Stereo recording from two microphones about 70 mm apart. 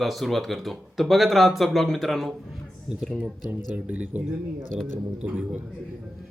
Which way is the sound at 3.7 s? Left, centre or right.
Centre.